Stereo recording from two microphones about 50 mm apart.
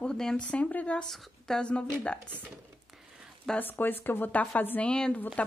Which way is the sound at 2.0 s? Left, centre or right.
Left.